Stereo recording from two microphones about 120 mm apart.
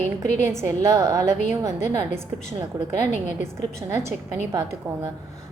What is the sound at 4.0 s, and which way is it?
A woman's voice, 20° right (ahead or behind).